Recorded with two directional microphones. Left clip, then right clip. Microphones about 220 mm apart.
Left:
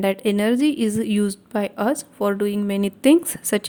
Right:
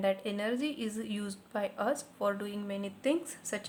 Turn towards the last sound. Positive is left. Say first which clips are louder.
# left 16 dB
turn(degrees=45)  # may be behind; listen again after turning